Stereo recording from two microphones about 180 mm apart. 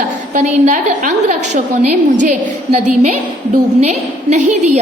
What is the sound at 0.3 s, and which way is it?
Speech, 40° right (ahead or behind).